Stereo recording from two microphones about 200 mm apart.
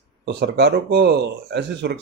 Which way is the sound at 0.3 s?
60° right (ahead or behind).